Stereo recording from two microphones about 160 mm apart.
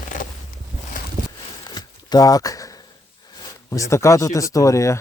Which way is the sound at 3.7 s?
20° left (ahead or behind).